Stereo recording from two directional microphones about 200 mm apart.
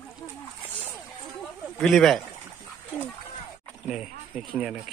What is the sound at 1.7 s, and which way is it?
Speech, centre (ahead or behind).